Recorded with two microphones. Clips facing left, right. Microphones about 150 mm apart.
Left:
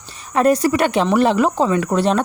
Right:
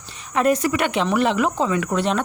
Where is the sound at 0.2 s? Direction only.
35° left (ahead or behind).